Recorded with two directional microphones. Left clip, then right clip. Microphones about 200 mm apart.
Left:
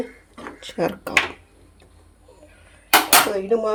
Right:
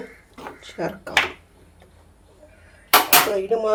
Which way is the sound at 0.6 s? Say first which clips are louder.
Left 5 dB; 45° left (ahead or behind).